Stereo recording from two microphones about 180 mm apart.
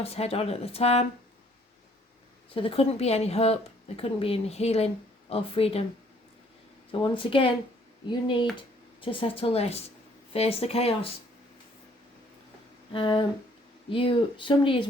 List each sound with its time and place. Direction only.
0.0 s a woman's voice: 35° left (ahead or behind)
2.6 s a woman's voice: 30° left (ahead or behind)
7.0 s speech: 30° left (ahead or behind)
9.0 s a woman's voice: 30° left (ahead or behind)
12.9 s speech: 30° left (ahead or behind)